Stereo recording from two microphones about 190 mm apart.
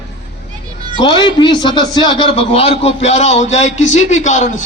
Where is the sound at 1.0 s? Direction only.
25° left (ahead or behind).